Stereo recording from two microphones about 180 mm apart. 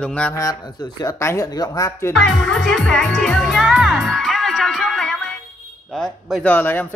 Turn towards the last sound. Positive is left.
turn(degrees=10)  # may be behind; listen again after turning